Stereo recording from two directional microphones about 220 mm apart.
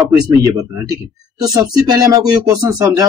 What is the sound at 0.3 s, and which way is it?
Speech, 15° right (ahead or behind).